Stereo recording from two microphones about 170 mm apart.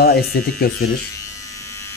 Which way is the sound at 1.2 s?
20° left (ahead or behind).